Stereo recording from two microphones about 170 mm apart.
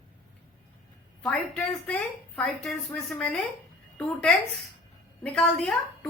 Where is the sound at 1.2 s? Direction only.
5° left (ahead or behind).